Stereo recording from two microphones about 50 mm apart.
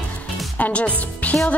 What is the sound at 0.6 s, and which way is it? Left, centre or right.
Music, left.